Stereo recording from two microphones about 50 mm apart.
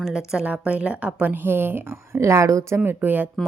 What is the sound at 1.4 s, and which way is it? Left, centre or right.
Speech, right.